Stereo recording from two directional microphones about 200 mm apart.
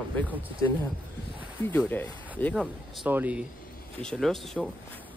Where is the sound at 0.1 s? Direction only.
10° left (ahead or behind).